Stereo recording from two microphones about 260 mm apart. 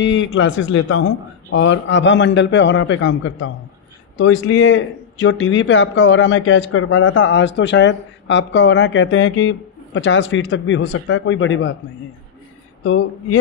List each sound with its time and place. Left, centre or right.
0.0 s speech: left
12.8 s speech: left